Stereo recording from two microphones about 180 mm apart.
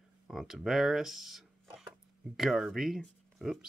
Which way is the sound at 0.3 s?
Centre (ahead or behind).